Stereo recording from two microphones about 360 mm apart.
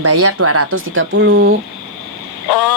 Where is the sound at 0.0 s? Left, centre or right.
Right.